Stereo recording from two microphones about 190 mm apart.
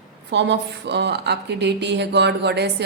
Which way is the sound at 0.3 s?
65° right (ahead or behind).